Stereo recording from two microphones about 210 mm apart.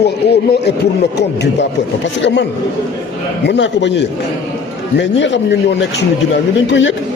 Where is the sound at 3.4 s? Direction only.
55° left (ahead or behind).